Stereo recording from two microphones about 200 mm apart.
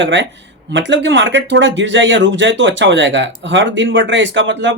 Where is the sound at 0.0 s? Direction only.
65° right (ahead or behind).